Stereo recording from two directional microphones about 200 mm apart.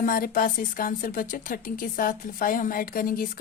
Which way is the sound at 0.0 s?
45° left (ahead or behind).